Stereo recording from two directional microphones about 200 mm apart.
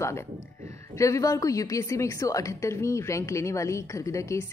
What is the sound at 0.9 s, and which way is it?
A woman's voice, 15° left (ahead or behind).